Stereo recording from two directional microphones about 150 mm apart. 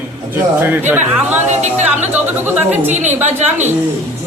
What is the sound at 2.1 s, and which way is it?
Speech, 10° right (ahead or behind).